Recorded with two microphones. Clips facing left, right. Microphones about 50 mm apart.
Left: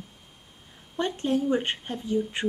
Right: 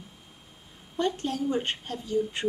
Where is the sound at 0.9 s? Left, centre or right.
Left.